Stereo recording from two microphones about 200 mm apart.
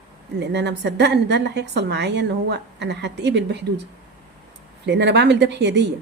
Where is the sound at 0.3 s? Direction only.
60° right (ahead or behind).